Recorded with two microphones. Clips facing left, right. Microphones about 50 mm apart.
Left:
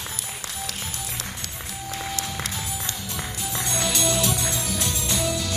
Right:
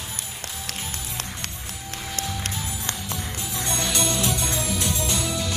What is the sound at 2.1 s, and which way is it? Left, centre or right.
Music, right.